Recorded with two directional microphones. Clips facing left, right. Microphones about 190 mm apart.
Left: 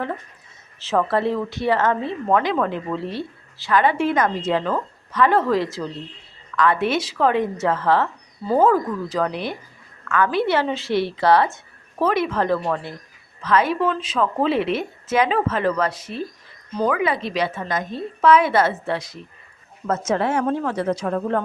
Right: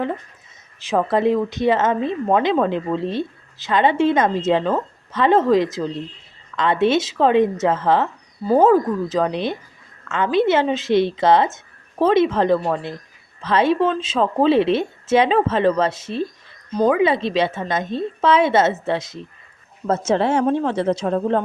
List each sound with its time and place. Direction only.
0.8 s speech: 15° right (ahead or behind)